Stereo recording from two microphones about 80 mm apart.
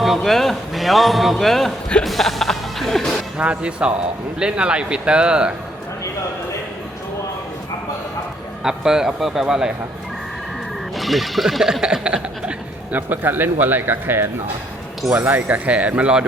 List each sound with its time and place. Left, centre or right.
0.0 s speech: centre
3.3 s speech: centre
8.6 s speech: centre
10.9 s speech: centre
13.0 s speech: right
15.3 s speech: right